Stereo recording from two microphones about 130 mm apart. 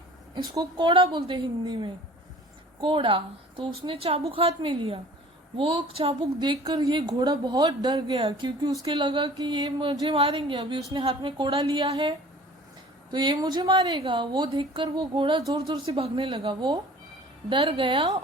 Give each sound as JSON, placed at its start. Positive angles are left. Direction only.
{"t": 0.5, "sound": "a woman's voice", "side_deg": -35}
{"t": 10.2, "sound": "a woman's voice", "side_deg": -45}
{"t": 13.1, "sound": "a woman's voice", "side_deg": -35}
{"t": 16.0, "sound": "a woman's voice", "side_deg": -45}